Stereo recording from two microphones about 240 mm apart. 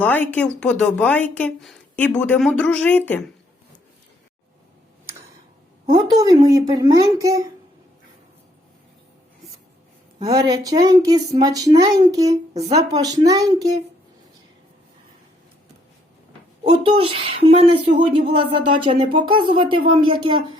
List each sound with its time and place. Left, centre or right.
0.0 s speech: centre
5.8 s speech: centre
10.2 s speech: centre
16.6 s speech: right